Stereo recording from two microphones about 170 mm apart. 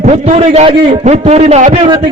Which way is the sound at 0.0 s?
40° right (ahead or behind).